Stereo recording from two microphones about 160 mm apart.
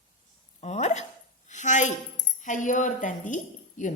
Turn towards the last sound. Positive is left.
turn(degrees=50)  # may be behind; listen again after turning